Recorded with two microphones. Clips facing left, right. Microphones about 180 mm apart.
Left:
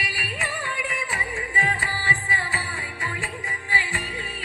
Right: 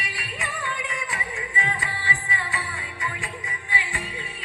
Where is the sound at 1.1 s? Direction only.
35° left (ahead or behind).